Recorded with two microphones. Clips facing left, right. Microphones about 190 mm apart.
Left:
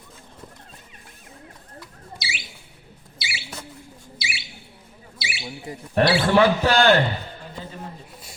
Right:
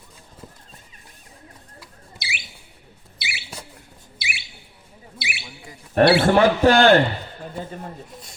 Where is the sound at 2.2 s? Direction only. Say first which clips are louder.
Even; 60° right (ahead or behind).